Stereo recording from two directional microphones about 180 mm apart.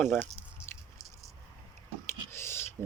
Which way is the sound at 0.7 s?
15° left (ahead or behind).